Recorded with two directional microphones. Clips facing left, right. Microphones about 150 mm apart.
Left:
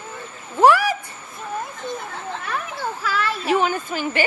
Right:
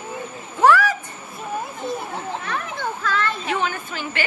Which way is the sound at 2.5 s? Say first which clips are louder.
Left 2 dB; 5° left (ahead or behind).